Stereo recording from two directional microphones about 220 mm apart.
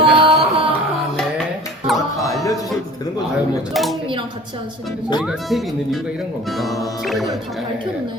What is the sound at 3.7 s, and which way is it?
Speech, centre (ahead or behind).